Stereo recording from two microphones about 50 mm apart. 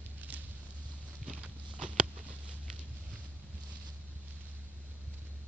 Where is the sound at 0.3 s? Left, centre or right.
Right.